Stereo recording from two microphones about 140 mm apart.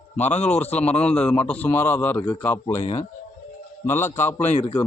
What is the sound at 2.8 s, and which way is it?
Speech, 50° left (ahead or behind).